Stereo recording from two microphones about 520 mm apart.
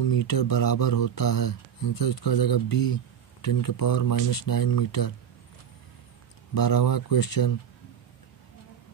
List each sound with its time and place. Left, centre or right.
0.0 s speech: left
6.5 s speech: left